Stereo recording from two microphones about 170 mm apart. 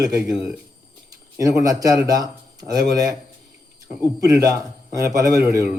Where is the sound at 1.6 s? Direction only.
20° right (ahead or behind).